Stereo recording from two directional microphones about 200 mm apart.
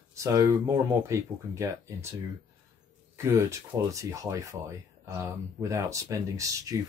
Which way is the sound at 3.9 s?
15° right (ahead or behind).